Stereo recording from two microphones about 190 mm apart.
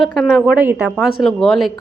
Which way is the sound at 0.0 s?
Centre (ahead or behind).